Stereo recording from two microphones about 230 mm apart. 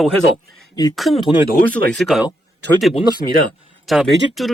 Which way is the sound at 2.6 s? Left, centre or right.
Right.